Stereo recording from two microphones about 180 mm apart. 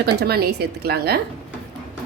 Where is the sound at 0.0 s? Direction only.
65° right (ahead or behind).